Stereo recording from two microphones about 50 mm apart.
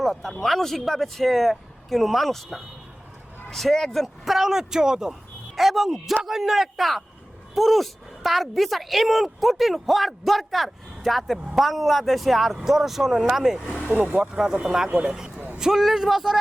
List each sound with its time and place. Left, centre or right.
0.0 s a woman's voice: centre
4.4 s a woman's voice: centre
13.9 s speech: right
14.2 s speech: centre